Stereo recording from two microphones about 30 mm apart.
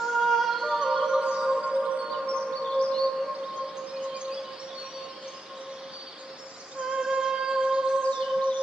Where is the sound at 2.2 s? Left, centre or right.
Left.